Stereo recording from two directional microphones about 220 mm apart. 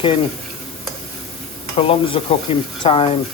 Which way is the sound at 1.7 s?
25° left (ahead or behind).